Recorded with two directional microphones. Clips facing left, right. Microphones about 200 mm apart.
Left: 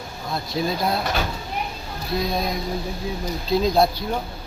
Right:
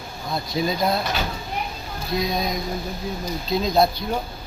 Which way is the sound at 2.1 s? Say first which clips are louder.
Even; 5° left (ahead or behind).